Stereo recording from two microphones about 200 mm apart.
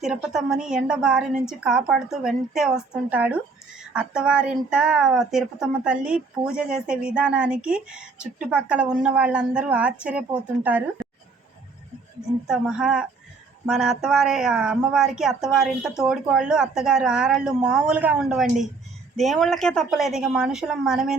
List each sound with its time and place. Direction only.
0.0 s speech: centre (ahead or behind)
12.5 s speech: 5° right (ahead or behind)